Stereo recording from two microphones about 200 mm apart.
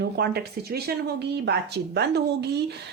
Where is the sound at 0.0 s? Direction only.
55° right (ahead or behind).